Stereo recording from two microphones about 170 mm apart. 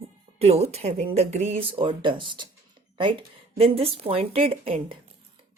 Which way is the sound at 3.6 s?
35° right (ahead or behind).